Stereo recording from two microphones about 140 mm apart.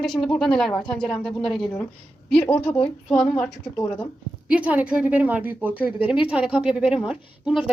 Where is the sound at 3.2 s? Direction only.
5° left (ahead or behind).